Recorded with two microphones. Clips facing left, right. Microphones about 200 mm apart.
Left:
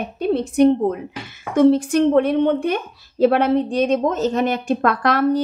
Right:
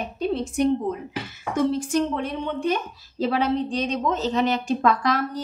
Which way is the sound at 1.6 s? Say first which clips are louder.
Left 8 dB; 65° left (ahead or behind).